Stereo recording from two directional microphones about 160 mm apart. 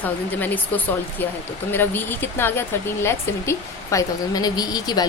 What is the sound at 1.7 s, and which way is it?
Speech, 15° left (ahead or behind).